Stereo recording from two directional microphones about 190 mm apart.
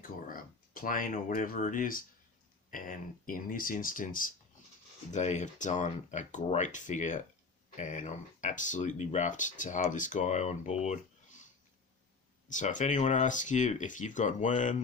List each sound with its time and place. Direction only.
0.0 s speech: 45° left (ahead or behind)
12.5 s speech: 40° left (ahead or behind)